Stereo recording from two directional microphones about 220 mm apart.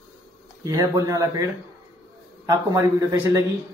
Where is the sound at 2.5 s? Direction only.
15° right (ahead or behind).